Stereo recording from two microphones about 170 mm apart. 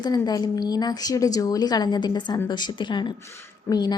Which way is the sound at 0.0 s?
25° left (ahead or behind).